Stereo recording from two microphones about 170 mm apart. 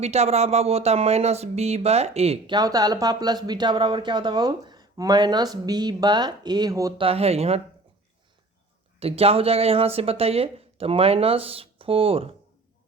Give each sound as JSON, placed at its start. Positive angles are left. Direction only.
{"t": 0.0, "sound": "speech", "side_deg": -40}
{"t": 2.6, "sound": "speech", "side_deg": -25}
{"t": 7.0, "sound": "speech", "side_deg": -35}
{"t": 9.0, "sound": "speech", "side_deg": -35}